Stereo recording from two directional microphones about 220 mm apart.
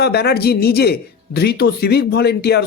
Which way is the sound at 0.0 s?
45° left (ahead or behind).